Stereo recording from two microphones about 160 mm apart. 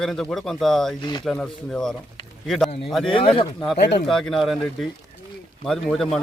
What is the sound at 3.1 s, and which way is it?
Speech, 35° left (ahead or behind).